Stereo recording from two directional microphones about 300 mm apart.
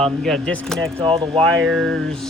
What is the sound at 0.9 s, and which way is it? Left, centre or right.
Speech, centre.